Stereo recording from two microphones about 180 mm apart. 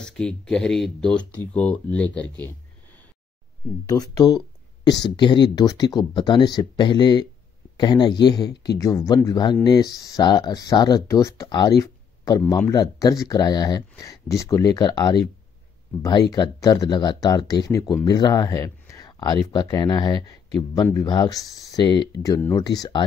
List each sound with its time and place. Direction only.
0.0 s speech: 5° left (ahead or behind)
3.8 s speech: 20° left (ahead or behind)